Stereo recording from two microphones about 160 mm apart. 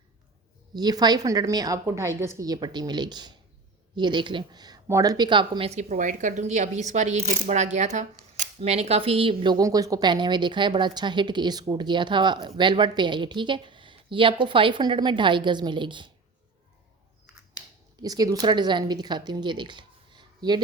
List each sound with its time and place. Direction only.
0.7 s speech: 25° right (ahead or behind)
18.0 s speech: 25° right (ahead or behind)